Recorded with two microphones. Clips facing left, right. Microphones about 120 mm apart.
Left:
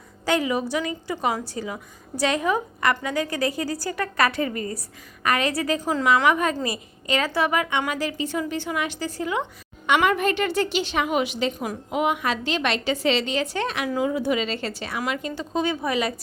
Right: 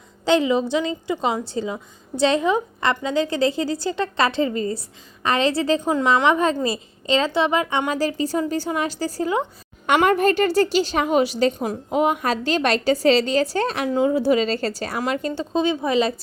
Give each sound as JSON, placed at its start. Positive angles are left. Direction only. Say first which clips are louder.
{"t": 0.3, "sound": "a woman's voice", "louder": "right 5 dB", "side_deg": -25}
{"t": 15.5, "sound": "a woman's voice", "louder": "right 4 dB", "side_deg": -25}